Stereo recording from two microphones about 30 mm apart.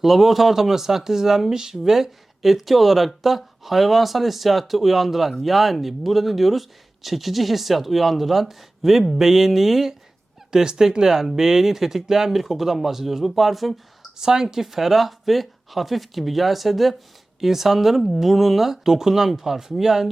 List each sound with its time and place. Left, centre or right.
0.0 s speech: centre
10.5 s speech: centre
14.2 s speech: centre